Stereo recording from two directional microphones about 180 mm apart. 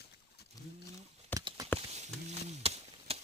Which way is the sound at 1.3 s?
25° right (ahead or behind).